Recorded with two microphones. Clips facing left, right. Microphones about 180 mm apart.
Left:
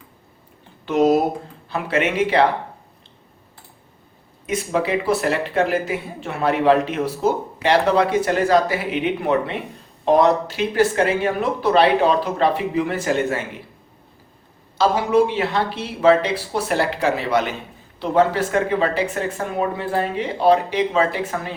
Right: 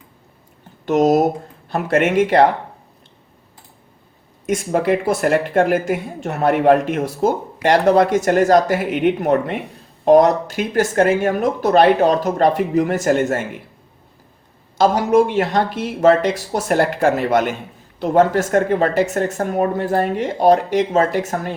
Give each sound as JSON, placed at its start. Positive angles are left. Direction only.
{"t": 0.9, "sound": "speech", "side_deg": -45}
{"t": 4.4, "sound": "speech", "side_deg": -45}
{"t": 14.8, "sound": "speech", "side_deg": -45}